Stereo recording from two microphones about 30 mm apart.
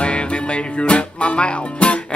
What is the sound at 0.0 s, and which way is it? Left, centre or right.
Music, left.